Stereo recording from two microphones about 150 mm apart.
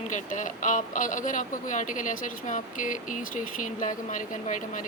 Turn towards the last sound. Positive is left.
turn(degrees=60)  # may be behind; listen again after turning